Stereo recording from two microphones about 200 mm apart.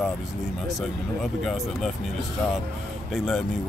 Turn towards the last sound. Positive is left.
turn(degrees=0)  # may be behind; listen again after turning